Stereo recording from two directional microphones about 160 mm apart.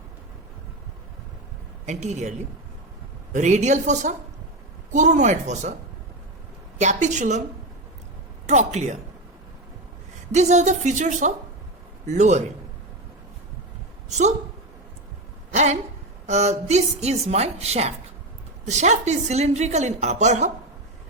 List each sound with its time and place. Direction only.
1.9 s a woman's voice: 45° right (ahead or behind)
3.3 s a woman's voice: 50° right (ahead or behind)
6.7 s a woman's voice: 50° right (ahead or behind)
8.4 s a woman's voice: 45° right (ahead or behind)
10.3 s a woman's voice: 45° right (ahead or behind)
14.1 s a woman's voice: 45° right (ahead or behind)
15.5 s a woman's voice: 45° right (ahead or behind)